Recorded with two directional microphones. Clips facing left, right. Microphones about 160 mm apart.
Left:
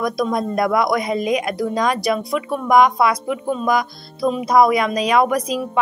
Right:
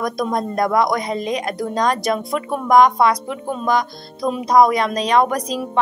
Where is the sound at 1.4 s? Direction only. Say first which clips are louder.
Left 2 dB; 35° right (ahead or behind).